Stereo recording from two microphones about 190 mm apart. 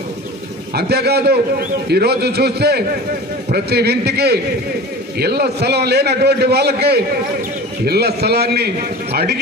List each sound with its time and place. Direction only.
0.7 s a man's voice: 60° right (ahead or behind)